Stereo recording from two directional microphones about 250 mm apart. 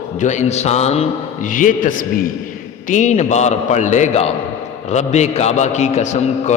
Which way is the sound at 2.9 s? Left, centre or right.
Left.